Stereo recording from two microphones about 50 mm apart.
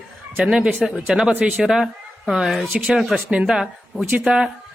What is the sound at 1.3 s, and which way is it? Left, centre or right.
Speech, right.